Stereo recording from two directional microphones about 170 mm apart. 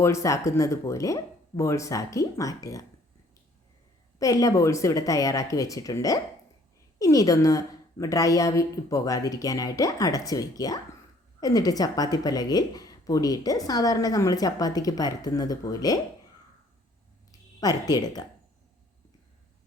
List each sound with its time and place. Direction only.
0.0 s speech: 15° left (ahead or behind)
4.2 s speech: 20° left (ahead or behind)
17.6 s speech: 20° left (ahead or behind)